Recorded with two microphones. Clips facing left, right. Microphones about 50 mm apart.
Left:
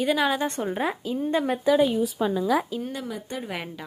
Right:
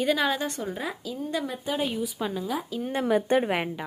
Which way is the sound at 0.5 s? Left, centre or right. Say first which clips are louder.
Left 5 dB; left.